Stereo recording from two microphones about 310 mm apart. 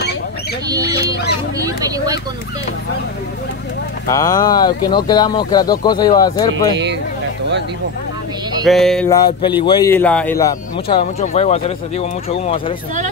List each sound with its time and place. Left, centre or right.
4.1 s a man's voice: centre
8.6 s a sound: centre
9.6 s a man's voice: centre